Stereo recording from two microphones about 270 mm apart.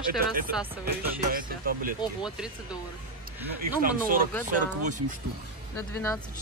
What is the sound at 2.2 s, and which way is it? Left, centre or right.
Speech, centre.